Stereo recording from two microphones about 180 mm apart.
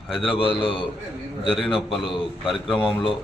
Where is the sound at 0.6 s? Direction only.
30° left (ahead or behind).